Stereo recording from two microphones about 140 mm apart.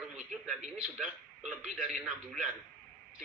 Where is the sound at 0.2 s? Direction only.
55° right (ahead or behind).